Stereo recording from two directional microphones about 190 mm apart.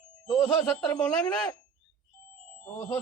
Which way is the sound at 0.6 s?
5° left (ahead or behind).